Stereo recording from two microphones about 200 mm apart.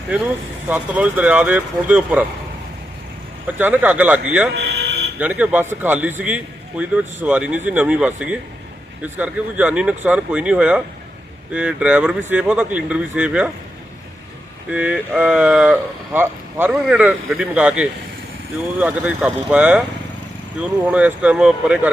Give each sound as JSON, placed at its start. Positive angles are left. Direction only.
{"t": 0.7, "sound": "a man's voice", "side_deg": -10}
{"t": 3.4, "sound": "a man's voice", "side_deg": -10}
{"t": 4.5, "sound": "fire alarm", "side_deg": -60}
{"t": 5.2, "sound": "a man's voice", "side_deg": -10}
{"t": 14.7, "sound": "a man's voice", "side_deg": -5}